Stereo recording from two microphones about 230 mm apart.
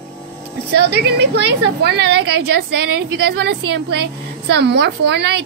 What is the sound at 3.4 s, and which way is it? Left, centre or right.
A woman's voice, right.